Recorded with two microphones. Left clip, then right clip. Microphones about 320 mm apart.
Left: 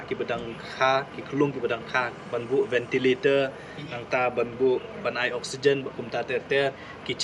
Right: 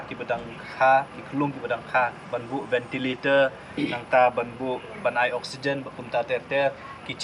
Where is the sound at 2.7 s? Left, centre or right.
Centre.